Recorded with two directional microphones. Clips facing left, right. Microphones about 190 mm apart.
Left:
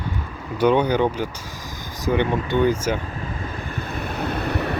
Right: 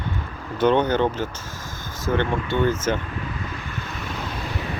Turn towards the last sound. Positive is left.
turn(degrees=65)  # may be behind; listen again after turning